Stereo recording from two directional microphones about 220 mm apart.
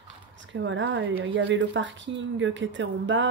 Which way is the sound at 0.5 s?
55° right (ahead or behind).